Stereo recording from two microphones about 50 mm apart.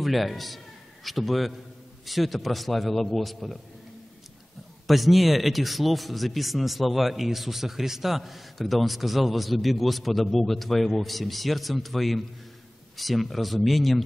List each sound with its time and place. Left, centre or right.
0.0 s speech: centre
4.8 s speech: centre